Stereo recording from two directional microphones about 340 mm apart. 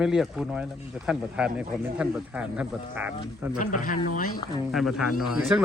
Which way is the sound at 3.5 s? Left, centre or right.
Left.